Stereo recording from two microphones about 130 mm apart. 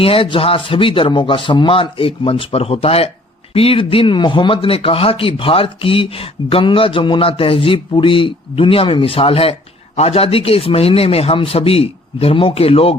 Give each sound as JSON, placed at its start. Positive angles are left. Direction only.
{"t": 0.0, "sound": "speech", "side_deg": 45}